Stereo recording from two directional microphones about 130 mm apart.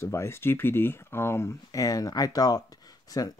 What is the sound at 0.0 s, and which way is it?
Speech, 20° left (ahead or behind).